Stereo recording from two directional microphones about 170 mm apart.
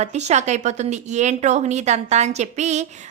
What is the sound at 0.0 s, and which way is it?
Speech, 40° right (ahead or behind).